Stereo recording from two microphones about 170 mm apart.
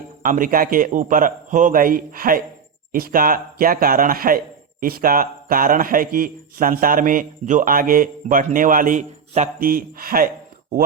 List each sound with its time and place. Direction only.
0.2 s a man's voice: 55° right (ahead or behind)